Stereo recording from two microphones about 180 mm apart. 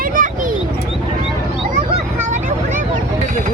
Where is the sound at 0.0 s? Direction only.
50° right (ahead or behind).